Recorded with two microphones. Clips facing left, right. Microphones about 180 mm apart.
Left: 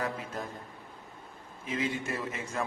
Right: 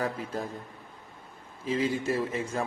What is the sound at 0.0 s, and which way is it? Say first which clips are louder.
Speech: right 3 dB; 30° right (ahead or behind).